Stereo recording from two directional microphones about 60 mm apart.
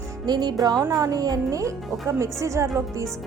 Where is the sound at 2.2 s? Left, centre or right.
Right.